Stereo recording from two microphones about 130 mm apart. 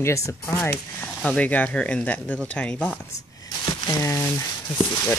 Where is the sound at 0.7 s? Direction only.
10° left (ahead or behind).